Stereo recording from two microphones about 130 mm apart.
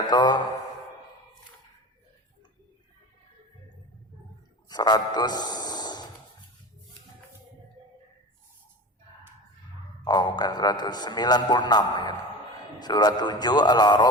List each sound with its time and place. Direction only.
0.0 s a man's voice: 35° left (ahead or behind)
4.7 s a sound: 35° left (ahead or behind)
10.0 s a man's voice: 35° left (ahead or behind)